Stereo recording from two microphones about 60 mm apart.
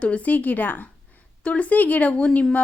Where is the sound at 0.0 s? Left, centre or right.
Left.